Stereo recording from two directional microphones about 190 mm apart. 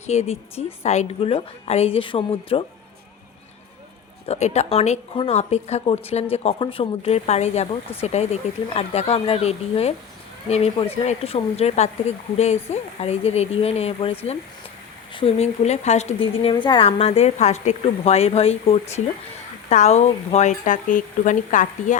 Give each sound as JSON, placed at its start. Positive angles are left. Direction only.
{"t": 0.1, "sound": "speech", "side_deg": 35}
{"t": 4.3, "sound": "speech", "side_deg": 35}
{"t": 16.4, "sound": "speech", "side_deg": 25}